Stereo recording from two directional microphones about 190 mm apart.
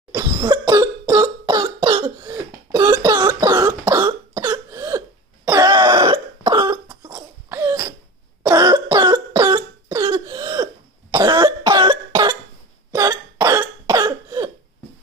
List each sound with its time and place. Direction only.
0.1 s cough: 20° right (ahead or behind)